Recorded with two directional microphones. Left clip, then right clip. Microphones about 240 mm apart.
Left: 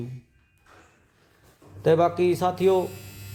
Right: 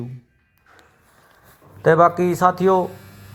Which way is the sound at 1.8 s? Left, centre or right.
Centre.